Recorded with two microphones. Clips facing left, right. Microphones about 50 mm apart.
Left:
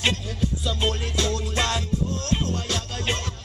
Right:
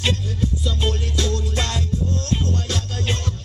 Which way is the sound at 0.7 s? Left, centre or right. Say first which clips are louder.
Right 1 dB; left.